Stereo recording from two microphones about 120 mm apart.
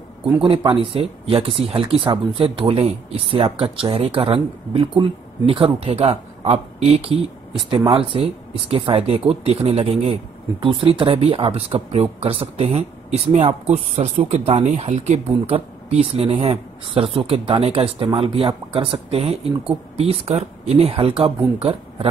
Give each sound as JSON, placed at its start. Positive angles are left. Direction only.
{"t": 0.4, "sound": "speech", "side_deg": -45}